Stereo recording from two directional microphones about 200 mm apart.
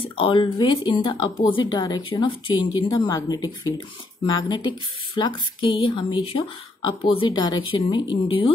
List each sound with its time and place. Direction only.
0.0 s speech: 25° left (ahead or behind)